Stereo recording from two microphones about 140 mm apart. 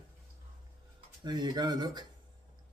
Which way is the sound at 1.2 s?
30° right (ahead or behind).